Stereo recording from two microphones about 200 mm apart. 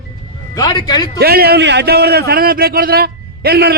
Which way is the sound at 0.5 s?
20° left (ahead or behind).